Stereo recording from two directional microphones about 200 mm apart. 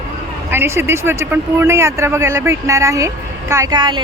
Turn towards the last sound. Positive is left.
turn(degrees=-20)  # may be behind; listen again after turning